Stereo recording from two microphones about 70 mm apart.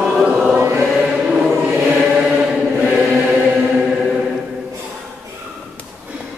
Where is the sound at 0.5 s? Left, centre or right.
Right.